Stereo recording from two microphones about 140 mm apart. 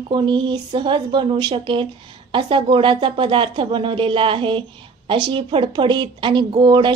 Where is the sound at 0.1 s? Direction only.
35° right (ahead or behind).